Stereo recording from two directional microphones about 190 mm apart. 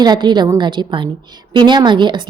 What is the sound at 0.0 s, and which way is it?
A woman's voice, 25° right (ahead or behind).